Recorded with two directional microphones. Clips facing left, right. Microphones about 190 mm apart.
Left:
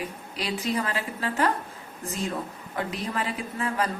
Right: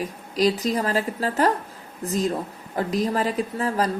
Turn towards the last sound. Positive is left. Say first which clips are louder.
# right 5 dB
turn(degrees=-35)  # may be behind; listen again after turning